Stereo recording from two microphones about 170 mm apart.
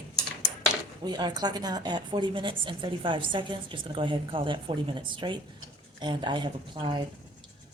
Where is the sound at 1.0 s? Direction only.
25° right (ahead or behind).